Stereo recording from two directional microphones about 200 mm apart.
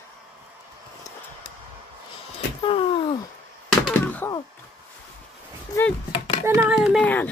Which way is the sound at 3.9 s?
10° left (ahead or behind).